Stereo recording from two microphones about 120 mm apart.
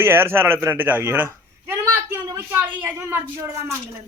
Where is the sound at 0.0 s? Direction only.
20° right (ahead or behind).